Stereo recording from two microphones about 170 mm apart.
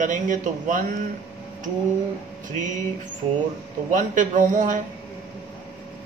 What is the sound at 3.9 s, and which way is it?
Speech, 50° right (ahead or behind).